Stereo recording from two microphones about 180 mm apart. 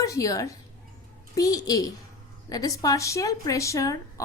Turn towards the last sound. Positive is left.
turn(degrees=15)  # may be behind; listen again after turning